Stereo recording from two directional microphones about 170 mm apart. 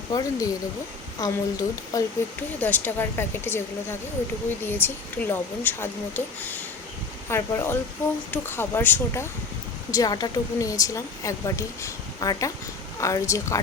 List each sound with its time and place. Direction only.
0.1 s a woman's voice: 20° left (ahead or behind)
4.6 s a woman's voice: 10° left (ahead or behind)